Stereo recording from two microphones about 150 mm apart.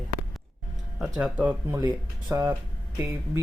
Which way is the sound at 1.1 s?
10° right (ahead or behind).